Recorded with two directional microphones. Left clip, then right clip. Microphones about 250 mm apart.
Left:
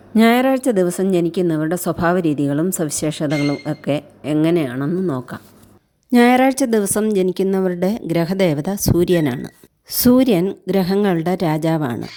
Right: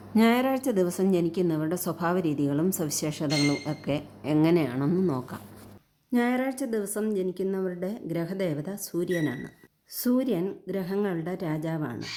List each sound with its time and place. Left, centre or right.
0.1 s a woman's voice: left
6.1 s a woman's voice: left